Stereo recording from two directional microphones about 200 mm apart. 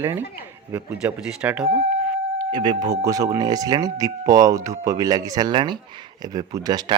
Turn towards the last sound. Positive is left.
turn(degrees=-20)  # may be behind; listen again after turning